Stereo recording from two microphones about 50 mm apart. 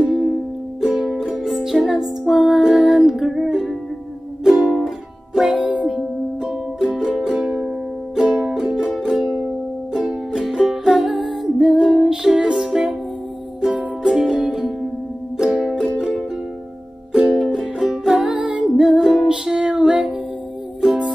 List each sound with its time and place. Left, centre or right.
0.1 s music: centre
5.7 s music: centre
8.9 s music: centre
17.1 s music: centre
17.4 s music: centre
18.0 s music: centre
20.8 s music: centre